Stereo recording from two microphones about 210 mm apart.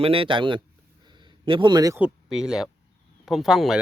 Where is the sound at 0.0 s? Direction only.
25° right (ahead or behind).